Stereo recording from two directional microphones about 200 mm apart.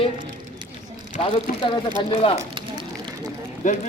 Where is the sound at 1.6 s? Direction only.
25° left (ahead or behind).